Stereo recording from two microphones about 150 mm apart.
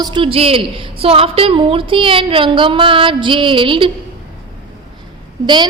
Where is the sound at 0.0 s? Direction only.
35° right (ahead or behind).